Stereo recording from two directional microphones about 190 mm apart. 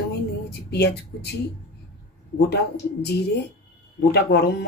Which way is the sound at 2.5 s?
60° left (ahead or behind).